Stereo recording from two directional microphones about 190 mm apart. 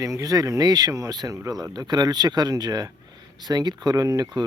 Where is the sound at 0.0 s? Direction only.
15° right (ahead or behind).